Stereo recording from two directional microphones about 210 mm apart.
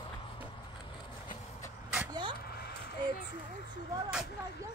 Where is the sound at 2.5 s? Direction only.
50° left (ahead or behind).